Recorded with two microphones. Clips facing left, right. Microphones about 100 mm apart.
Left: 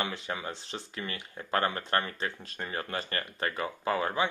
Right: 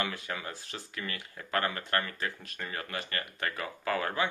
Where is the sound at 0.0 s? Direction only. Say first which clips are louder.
Left 1 dB; 25° left (ahead or behind).